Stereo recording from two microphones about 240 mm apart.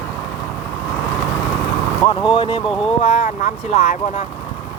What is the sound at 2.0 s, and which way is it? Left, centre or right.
Speech, centre.